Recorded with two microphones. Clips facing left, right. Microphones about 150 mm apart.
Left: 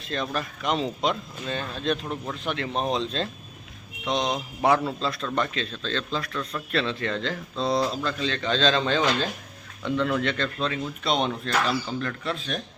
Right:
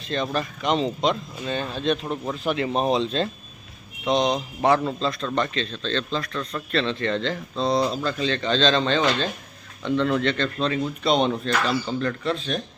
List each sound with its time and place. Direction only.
0.0 s a man's voice: centre (ahead or behind)